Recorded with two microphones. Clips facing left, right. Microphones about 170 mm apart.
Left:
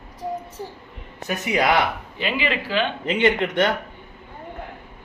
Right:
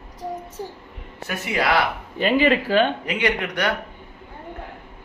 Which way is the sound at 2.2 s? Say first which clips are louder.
Right 8 dB; 45° right (ahead or behind).